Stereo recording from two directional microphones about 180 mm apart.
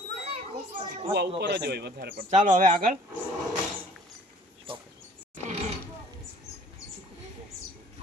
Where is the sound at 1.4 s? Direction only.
70° right (ahead or behind).